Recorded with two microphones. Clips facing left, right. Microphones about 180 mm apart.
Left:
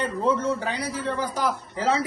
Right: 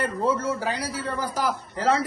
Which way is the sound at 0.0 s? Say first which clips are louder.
Left 1 dB; 5° right (ahead or behind).